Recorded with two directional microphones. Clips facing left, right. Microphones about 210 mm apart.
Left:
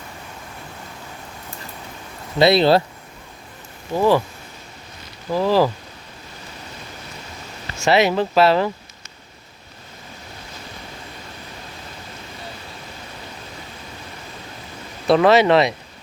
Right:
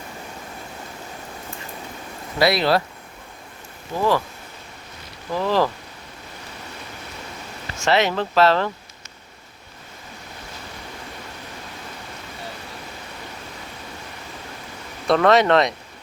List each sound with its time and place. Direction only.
2.4 s speech: 25° left (ahead or behind)
3.9 s speech: 15° left (ahead or behind)
5.3 s speech: 10° left (ahead or behind)
7.8 s speech: 10° left (ahead or behind)
15.0 s speech: 5° left (ahead or behind)